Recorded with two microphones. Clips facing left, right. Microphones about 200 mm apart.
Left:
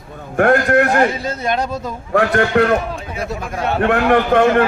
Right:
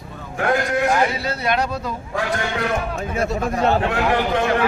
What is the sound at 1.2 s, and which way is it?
Speech, 45° left (ahead or behind).